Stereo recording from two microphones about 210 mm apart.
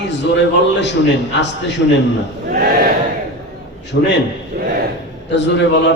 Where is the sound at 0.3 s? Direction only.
55° left (ahead or behind).